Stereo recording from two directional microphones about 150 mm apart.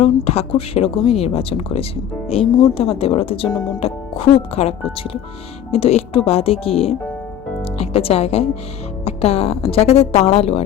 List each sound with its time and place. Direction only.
0.0 s speech: 45° left (ahead or behind)
5.7 s a woman's voice: 40° left (ahead or behind)